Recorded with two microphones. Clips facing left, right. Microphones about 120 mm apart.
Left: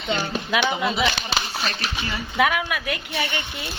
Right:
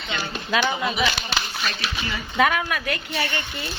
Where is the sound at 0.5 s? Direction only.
15° left (ahead or behind).